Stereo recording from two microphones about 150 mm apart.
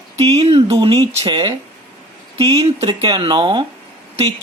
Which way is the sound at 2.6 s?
40° right (ahead or behind).